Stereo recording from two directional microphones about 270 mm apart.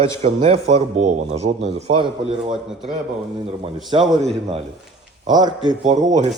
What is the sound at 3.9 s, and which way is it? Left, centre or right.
Speech, centre.